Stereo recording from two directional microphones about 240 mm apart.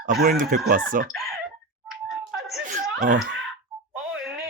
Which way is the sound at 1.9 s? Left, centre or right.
Centre.